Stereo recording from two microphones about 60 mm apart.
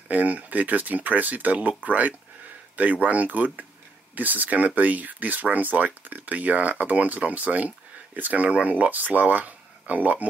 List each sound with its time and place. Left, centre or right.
0.1 s speech: right